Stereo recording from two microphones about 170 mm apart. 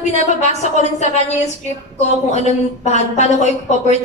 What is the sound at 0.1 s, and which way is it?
A man's voice, 40° left (ahead or behind).